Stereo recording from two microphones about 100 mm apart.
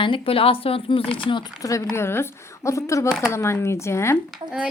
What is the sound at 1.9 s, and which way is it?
A woman's voice, 25° left (ahead or behind).